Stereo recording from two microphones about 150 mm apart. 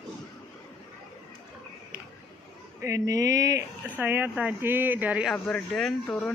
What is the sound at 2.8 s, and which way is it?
Speech, 20° right (ahead or behind).